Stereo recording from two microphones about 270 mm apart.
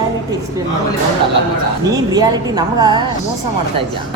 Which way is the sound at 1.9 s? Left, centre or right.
Centre.